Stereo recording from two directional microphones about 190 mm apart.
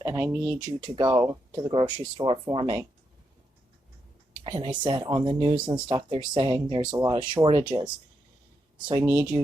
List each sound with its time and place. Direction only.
0.0 s speech: 15° right (ahead or behind)
4.4 s speech: 25° right (ahead or behind)
8.9 s speech: 15° right (ahead or behind)